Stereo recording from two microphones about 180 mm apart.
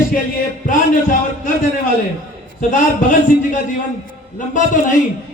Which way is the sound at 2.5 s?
45° left (ahead or behind).